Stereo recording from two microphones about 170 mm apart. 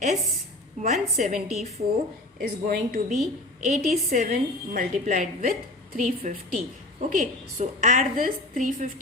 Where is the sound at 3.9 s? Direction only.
55° right (ahead or behind).